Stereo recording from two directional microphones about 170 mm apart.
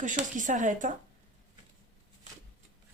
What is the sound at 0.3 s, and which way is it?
Speech, 45° right (ahead or behind).